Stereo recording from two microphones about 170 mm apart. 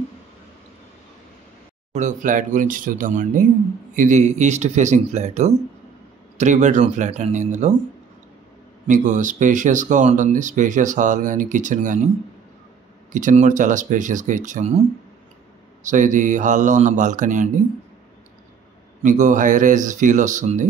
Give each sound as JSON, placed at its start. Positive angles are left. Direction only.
{"t": 1.9, "sound": "speech", "side_deg": -45}
{"t": 8.8, "sound": "speech", "side_deg": -45}
{"t": 13.1, "sound": "speech", "side_deg": -45}
{"t": 15.8, "sound": "speech", "side_deg": -50}
{"t": 19.0, "sound": "speech", "side_deg": -50}